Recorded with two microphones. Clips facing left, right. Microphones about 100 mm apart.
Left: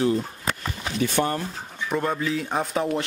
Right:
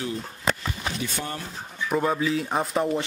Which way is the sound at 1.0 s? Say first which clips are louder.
Left 14 dB; 65° left (ahead or behind).